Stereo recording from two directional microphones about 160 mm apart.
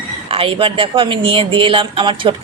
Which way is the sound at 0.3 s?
35° right (ahead or behind).